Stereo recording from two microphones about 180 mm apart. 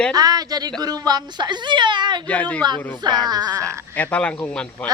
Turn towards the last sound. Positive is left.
turn(degrees=5)  # may be behind; listen again after turning